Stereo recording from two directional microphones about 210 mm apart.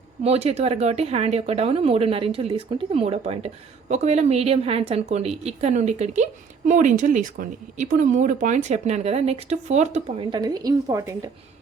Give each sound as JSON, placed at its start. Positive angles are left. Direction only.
{"t": 0.2, "sound": "speech", "side_deg": -30}
{"t": 10.3, "sound": "a woman's voice", "side_deg": -20}